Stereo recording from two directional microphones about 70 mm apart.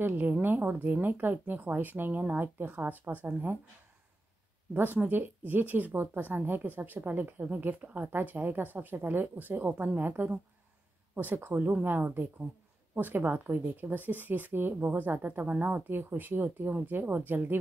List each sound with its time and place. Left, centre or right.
0.0 s speech: right
4.7 s speech: right